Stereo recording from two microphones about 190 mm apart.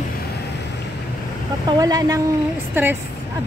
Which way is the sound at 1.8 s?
20° right (ahead or behind).